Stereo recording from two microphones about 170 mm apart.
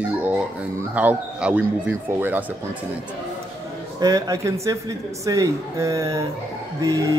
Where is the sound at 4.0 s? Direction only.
20° right (ahead or behind).